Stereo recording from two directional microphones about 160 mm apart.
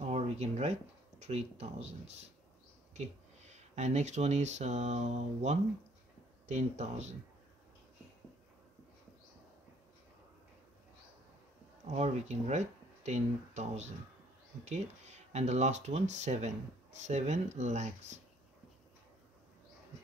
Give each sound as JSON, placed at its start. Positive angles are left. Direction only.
{"t": 0.0, "sound": "a sound", "side_deg": -40}
{"t": 1.2, "sound": "speech", "side_deg": -40}
{"t": 11.9, "sound": "speech", "side_deg": -45}